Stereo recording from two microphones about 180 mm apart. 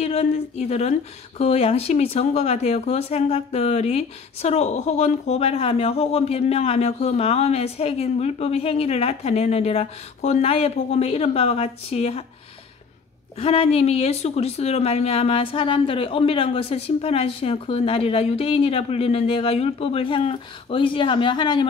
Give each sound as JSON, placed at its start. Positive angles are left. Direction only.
{"t": 0.0, "sound": "speech", "side_deg": 35}
{"t": 13.4, "sound": "speech", "side_deg": 35}